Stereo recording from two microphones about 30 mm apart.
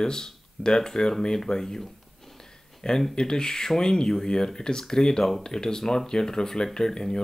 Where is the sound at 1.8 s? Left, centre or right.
Centre.